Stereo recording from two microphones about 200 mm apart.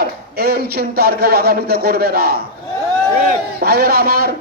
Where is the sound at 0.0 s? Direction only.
50° right (ahead or behind).